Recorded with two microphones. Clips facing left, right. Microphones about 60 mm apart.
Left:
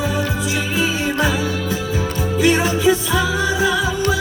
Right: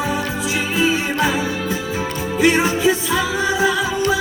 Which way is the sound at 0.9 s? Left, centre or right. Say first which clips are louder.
Right 1 dB; right.